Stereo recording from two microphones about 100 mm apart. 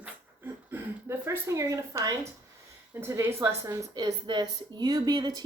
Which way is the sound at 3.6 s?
35° right (ahead or behind).